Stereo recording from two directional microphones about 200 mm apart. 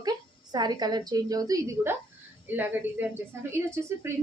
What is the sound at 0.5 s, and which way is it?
A woman's voice, 20° right (ahead or behind).